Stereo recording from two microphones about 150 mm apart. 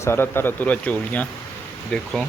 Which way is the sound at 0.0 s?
15° left (ahead or behind).